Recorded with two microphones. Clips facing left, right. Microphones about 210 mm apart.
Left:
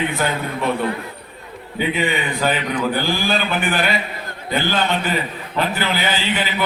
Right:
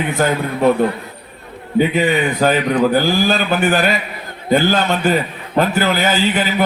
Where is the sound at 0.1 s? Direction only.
45° right (ahead or behind).